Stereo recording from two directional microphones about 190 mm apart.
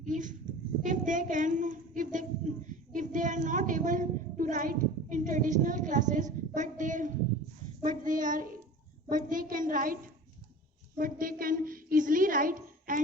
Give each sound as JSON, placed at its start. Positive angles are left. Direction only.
{"t": 0.0, "sound": "a woman's voice", "side_deg": -40}